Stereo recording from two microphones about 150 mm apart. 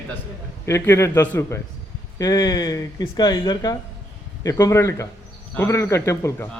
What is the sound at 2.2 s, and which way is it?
A man's voice, 25° left (ahead or behind).